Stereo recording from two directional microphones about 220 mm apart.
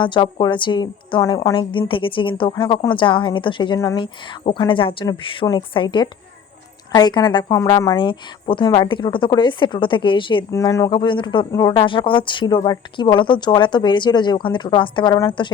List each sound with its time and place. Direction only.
0.0 s a woman's voice: 20° left (ahead or behind)